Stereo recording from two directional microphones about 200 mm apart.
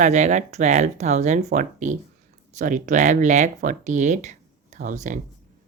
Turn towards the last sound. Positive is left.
turn(degrees=-40)  # may be behind; listen again after turning